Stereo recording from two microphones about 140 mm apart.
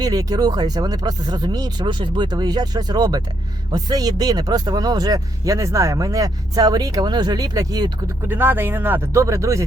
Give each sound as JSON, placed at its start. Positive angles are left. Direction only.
{"t": 0.0, "sound": "speech", "side_deg": -25}
{"t": 8.3, "sound": "speech", "side_deg": -15}